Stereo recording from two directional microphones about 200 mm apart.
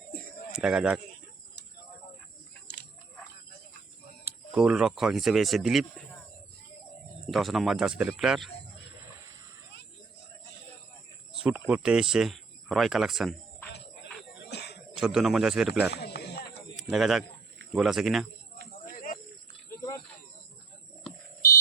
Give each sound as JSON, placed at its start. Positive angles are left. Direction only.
{"t": 0.5, "sound": "speech", "side_deg": -5}
{"t": 2.7, "sound": "wild animals", "side_deg": 60}
{"t": 4.3, "sound": "speech", "side_deg": -5}
{"t": 7.3, "sound": "speech", "side_deg": 0}
{"t": 11.3, "sound": "speech", "side_deg": -5}
{"t": 14.4, "sound": "a sound", "side_deg": 55}
{"t": 14.9, "sound": "speech", "side_deg": -5}
{"t": 15.9, "sound": "a sound", "side_deg": 55}
{"t": 16.7, "sound": "speech", "side_deg": 0}
{"t": 18.9, "sound": "snake", "side_deg": 45}
{"t": 19.7, "sound": "a sound", "side_deg": 15}